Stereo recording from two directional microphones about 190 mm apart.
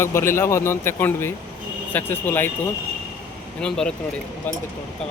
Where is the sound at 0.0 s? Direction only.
15° left (ahead or behind).